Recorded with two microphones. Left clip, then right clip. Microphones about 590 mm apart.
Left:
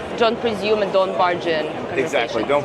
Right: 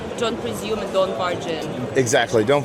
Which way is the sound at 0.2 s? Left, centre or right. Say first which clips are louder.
Left 7 dB; left.